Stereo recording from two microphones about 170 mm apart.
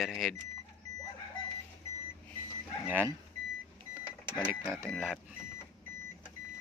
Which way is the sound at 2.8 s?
10° right (ahead or behind).